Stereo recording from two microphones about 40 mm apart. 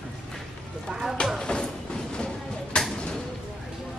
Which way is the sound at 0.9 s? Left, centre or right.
Centre.